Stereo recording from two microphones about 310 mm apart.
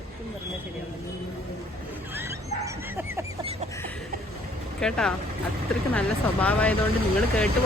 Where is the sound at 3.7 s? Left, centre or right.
Centre.